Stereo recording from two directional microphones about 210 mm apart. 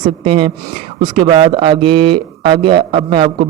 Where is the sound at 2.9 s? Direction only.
25° right (ahead or behind).